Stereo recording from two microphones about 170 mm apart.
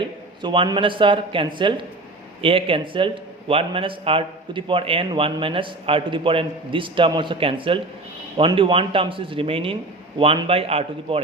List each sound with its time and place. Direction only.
0.4 s a man's voice: 30° right (ahead or behind)